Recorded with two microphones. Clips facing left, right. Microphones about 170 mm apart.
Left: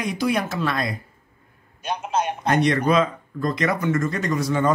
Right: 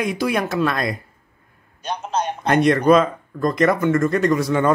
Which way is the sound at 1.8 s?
10° left (ahead or behind).